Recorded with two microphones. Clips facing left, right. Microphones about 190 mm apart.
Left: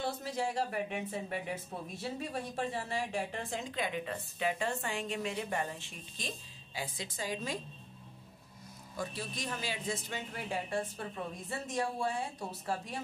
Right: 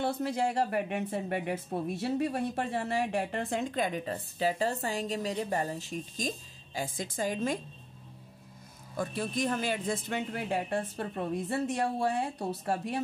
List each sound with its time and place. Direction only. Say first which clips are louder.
0.0 s speech: right 6 dB; 65° right (ahead or behind)
8.9 s a man's voice: right 7 dB; 55° right (ahead or behind)